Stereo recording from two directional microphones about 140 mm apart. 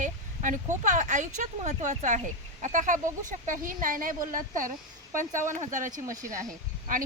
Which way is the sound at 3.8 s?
80° right.